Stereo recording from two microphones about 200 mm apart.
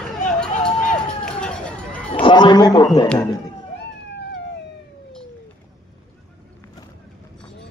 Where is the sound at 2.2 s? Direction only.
20° left (ahead or behind).